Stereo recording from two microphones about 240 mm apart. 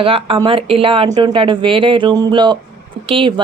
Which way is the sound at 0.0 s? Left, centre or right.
Right.